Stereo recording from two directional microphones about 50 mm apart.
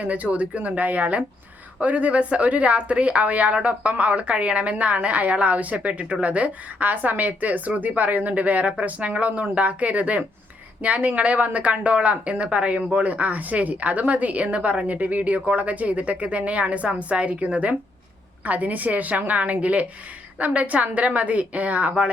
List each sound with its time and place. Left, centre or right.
0.0 s a woman's voice: right